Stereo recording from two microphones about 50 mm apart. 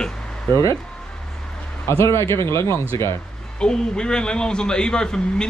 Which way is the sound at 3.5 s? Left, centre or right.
Centre.